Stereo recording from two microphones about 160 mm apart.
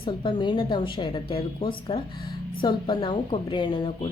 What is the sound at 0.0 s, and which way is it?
A woman's voice, 30° left (ahead or behind).